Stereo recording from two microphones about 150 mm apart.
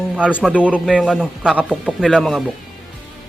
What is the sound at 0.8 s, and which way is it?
Speech, 5° right (ahead or behind).